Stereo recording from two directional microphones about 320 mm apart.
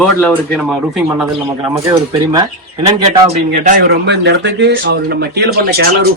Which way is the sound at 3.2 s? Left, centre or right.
Right.